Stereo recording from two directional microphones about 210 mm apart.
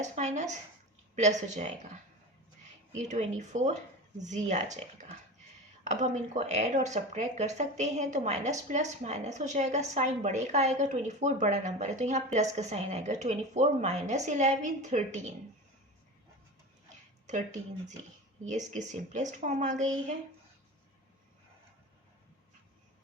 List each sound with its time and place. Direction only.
0.0 s speech: 35° right (ahead or behind)
3.0 s speech: 35° right (ahead or behind)
17.2 s speech: 35° right (ahead or behind)